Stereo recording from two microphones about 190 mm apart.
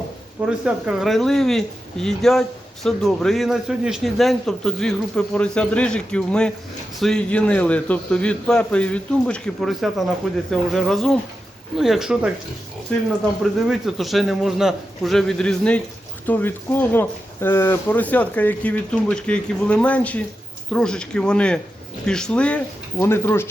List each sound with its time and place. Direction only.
0.4 s a man's voice: 5° right (ahead or behind); by 23.5 s 15° left (ahead or behind)